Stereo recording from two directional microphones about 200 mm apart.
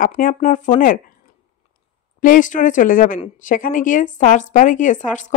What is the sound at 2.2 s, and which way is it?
A woman's voice, 40° left (ahead or behind).